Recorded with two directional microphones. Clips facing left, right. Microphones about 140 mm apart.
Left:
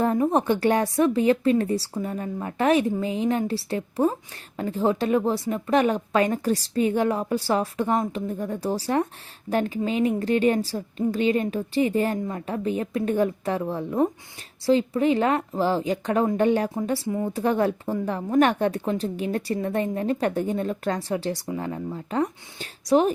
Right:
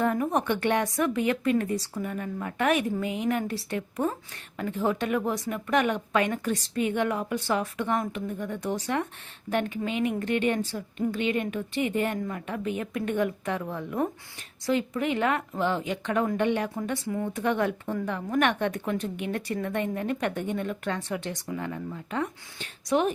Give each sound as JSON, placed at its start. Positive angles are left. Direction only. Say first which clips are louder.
{"t": 0.0, "sound": "a woman's voice", "louder": "left 4 dB", "side_deg": 30}